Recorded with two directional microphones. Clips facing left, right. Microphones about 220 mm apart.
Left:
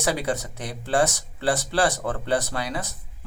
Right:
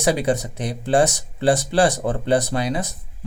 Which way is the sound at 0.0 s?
15° right (ahead or behind).